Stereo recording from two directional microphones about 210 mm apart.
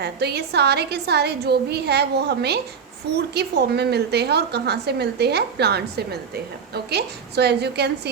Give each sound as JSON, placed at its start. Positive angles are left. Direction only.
{"t": 0.0, "sound": "a woman's voice", "side_deg": -50}